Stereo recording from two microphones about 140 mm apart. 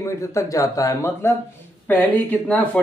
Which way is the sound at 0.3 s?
20° left (ahead or behind).